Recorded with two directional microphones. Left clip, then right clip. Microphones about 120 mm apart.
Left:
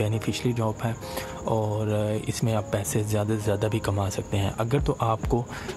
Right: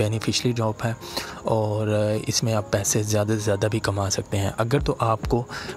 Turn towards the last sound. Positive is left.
turn(degrees=-30)  # may be behind; listen again after turning